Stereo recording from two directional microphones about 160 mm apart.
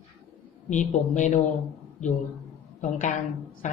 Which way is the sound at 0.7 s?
50° left (ahead or behind).